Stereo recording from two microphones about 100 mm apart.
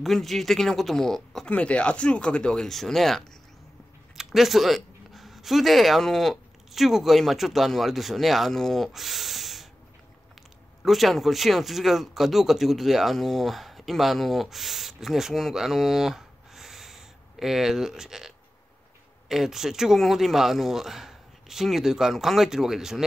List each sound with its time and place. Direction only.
0.0 s speech: centre (ahead or behind)
10.8 s speech: centre (ahead or behind)